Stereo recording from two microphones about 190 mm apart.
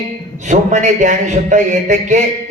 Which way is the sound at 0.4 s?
40° right (ahead or behind).